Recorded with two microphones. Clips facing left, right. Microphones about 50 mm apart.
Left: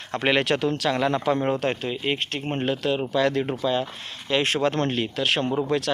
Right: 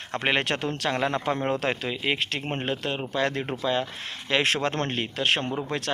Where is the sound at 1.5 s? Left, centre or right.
Right.